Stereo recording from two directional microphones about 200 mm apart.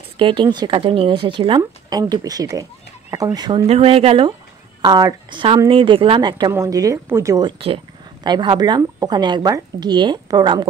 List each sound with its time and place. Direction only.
0.2 s speech: 25° right (ahead or behind)